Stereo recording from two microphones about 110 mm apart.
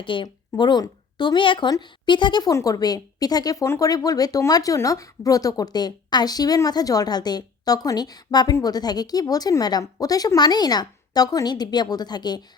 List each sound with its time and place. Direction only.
0.0 s a woman's voice: 50° left (ahead or behind)
2.5 s speech: 30° left (ahead or behind)